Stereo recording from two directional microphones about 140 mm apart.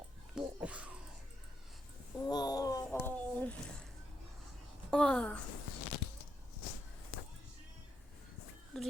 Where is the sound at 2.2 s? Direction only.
30° left (ahead or behind); by 3.6 s 10° left (ahead or behind).